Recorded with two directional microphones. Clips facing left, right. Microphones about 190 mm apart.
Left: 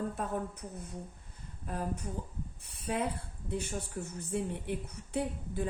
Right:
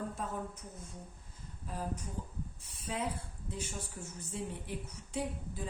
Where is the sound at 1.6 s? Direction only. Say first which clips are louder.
Left 3 dB; 60° left (ahead or behind).